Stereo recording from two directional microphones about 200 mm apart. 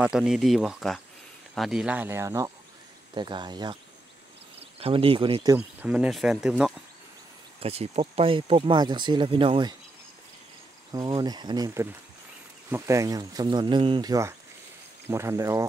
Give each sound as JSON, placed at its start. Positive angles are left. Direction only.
{"t": 0.0, "sound": "speech", "side_deg": -5}
{"t": 4.7, "sound": "speech", "side_deg": -30}
{"t": 5.8, "sound": "speech", "side_deg": -5}
{"t": 7.6, "sound": "speech", "side_deg": -30}
{"t": 10.9, "sound": "speech", "side_deg": -20}